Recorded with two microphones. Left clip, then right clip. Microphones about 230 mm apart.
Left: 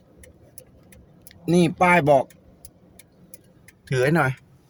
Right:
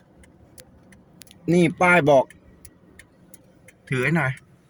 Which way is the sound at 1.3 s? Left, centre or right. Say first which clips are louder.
Right 1 dB; centre.